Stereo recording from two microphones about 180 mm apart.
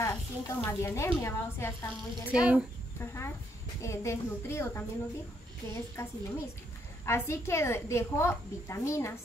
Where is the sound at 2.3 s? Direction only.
5° right (ahead or behind).